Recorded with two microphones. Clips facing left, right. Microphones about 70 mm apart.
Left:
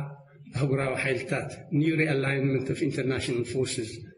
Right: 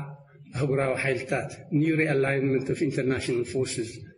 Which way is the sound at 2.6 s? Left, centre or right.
Centre.